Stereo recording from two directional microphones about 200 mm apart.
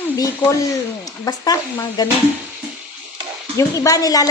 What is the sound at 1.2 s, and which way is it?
Speech, 20° left (ahead or behind).